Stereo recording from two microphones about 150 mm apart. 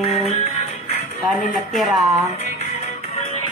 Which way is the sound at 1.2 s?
Centre (ahead or behind).